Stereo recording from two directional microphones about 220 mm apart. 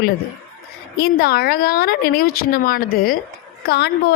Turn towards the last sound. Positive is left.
turn(degrees=45)  # may be behind; listen again after turning